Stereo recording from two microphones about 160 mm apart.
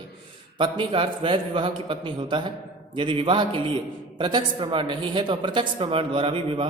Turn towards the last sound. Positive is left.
turn(degrees=-35)  # may be behind; listen again after turning